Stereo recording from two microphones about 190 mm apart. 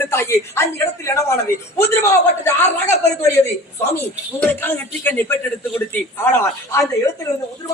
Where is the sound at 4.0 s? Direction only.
10° left (ahead or behind).